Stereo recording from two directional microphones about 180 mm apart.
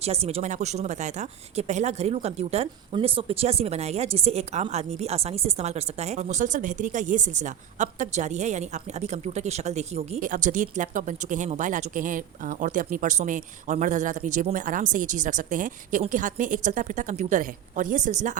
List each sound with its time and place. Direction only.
0.0 s speech: 35° right (ahead or behind)